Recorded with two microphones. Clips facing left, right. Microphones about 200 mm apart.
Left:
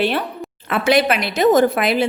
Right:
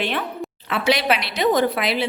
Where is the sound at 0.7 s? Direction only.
50° left (ahead or behind).